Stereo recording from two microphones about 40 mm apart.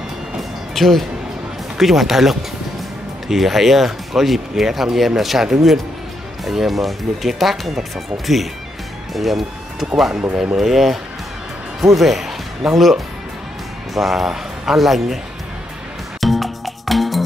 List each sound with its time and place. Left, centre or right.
0.4 s music: centre
1.8 s speech: centre
9.1 s speech: centre
10.3 s speech: right
10.6 s speech: centre
16.2 s music: centre